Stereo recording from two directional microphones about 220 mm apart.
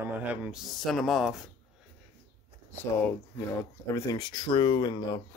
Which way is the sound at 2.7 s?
10° left (ahead or behind).